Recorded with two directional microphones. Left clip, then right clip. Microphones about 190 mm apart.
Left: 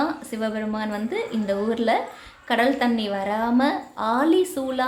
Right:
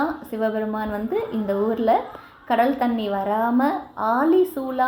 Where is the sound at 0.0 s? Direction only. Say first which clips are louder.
Right 2 dB; centre (ahead or behind).